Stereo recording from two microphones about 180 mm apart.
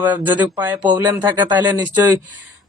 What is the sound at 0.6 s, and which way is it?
Speech, 10° right (ahead or behind).